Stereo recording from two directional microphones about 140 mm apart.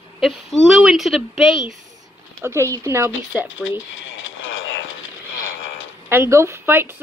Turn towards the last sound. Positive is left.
turn(degrees=-15)  # may be behind; listen again after turning